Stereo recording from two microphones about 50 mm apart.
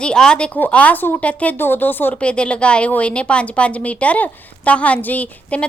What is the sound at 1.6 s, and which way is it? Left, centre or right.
Speech, left.